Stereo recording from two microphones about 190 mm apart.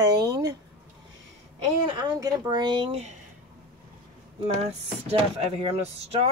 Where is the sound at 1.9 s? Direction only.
20° right (ahead or behind).